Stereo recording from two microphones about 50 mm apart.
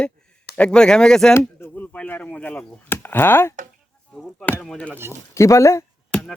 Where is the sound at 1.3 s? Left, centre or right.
Left.